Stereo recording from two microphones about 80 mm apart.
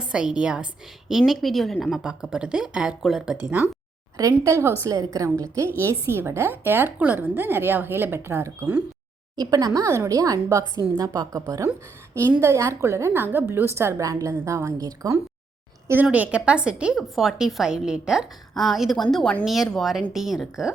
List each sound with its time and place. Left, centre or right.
0.0 s a woman's voice: centre
3.4 s a woman's voice: centre
4.2 s a woman's voice: right
9.3 s a woman's voice: right
12.4 s a woman's voice: right
16.1 s a woman's voice: centre
17.0 s a woman's voice: centre
19.1 s a woman's voice: centre
19.7 s a woman's voice: centre